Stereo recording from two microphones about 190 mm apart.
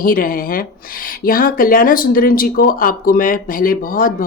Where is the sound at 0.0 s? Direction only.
50° left (ahead or behind).